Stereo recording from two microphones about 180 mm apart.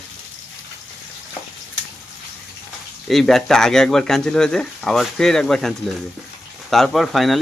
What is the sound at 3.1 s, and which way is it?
Speech, centre (ahead or behind).